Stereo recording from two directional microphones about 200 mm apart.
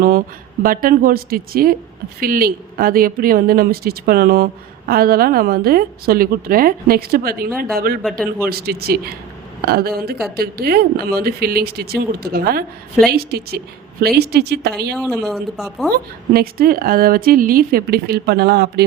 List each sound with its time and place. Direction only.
0.6 s a woman's voice: 45° right (ahead or behind)
14.9 s speech: centre (ahead or behind)
16.3 s a woman's voice: 50° right (ahead or behind)